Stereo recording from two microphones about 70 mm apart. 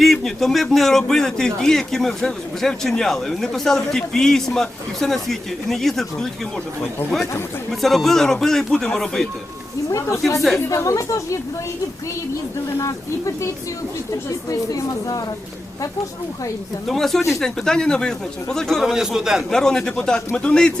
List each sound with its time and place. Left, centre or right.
0.0 s speech: centre
7.7 s speech: centre
9.9 s speech: left
12.8 s speech: left
16.9 s speech: centre
18.8 s speech: centre
19.5 s speech: centre